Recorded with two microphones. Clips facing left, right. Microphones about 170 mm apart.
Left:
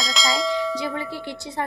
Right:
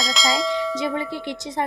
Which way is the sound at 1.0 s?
20° right (ahead or behind).